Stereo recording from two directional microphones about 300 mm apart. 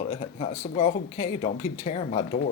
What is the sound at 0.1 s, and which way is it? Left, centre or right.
Speech, left.